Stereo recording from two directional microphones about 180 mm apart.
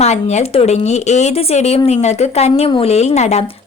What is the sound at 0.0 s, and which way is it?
Speech, 40° left (ahead or behind).